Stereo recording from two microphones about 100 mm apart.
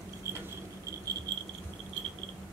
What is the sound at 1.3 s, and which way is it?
Rattle, 45° right (ahead or behind).